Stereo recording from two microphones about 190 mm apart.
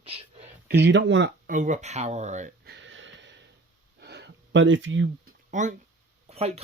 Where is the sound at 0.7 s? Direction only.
65° right (ahead or behind).